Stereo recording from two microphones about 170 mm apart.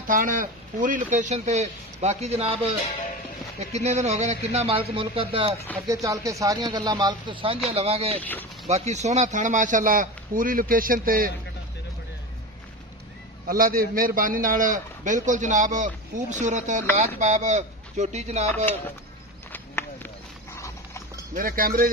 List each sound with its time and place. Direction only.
0.0 s a man's voice: 55° right (ahead or behind); by 5.6 s 35° right (ahead or behind)
5.9 s a man's voice: 20° right (ahead or behind); by 8.2 s 35° right (ahead or behind)
8.2 s speech: 10° left (ahead or behind)
8.6 s a man's voice: 40° right (ahead or behind); by 11.3 s 55° right (ahead or behind)
13.5 s a man's voice: 60° right (ahead or behind); by 18.7 s 40° right (ahead or behind)
19.5 s run: 10° left (ahead or behind)
20.5 s clip-clop: 15° left (ahead or behind)
21.4 s speech: 55° right (ahead or behind)